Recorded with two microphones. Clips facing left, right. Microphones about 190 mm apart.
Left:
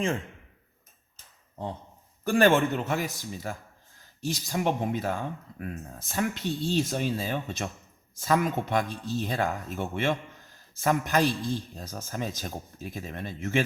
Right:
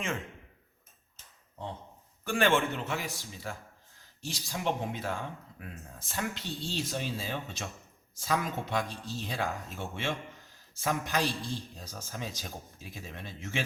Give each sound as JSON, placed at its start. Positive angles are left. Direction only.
{"t": 2.2, "sound": "a man's voice", "side_deg": 40}